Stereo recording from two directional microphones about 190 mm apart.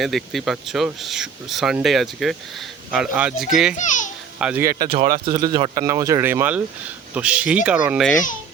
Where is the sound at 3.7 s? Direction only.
40° left (ahead or behind).